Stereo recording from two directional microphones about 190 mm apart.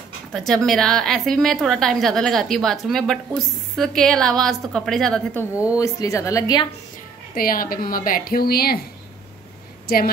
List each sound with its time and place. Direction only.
0.3 s a woman's voice: 5° left (ahead or behind)
5.8 s a woman's voice: 15° left (ahead or behind)
7.3 s a woman's voice: 50° left (ahead or behind)
9.8 s a woman's voice: 50° left (ahead or behind)